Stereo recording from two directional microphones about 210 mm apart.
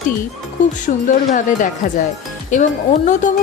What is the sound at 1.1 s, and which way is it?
Speech, 40° left (ahead or behind).